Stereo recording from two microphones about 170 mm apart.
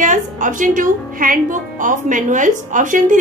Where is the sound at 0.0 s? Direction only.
50° right (ahead or behind).